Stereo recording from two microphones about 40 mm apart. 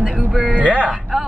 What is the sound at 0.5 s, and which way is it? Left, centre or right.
Speech, right.